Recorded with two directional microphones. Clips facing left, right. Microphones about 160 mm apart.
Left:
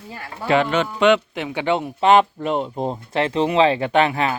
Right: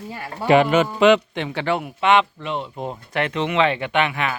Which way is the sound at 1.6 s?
20° left (ahead or behind).